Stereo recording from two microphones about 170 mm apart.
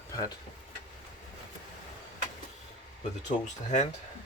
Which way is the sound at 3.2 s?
45° left (ahead or behind).